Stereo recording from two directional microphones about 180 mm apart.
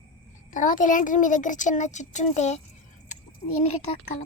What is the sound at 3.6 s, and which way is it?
Speech, 35° left (ahead or behind).